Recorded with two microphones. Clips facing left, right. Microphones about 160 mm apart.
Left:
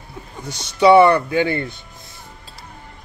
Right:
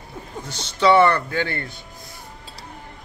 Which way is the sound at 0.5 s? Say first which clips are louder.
Left 5 dB; 15° left (ahead or behind).